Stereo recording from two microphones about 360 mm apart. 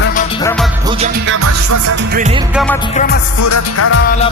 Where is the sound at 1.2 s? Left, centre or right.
Right.